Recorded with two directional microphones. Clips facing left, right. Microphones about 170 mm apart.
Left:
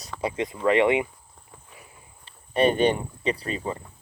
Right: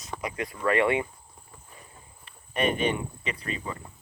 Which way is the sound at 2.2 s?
30° left (ahead or behind).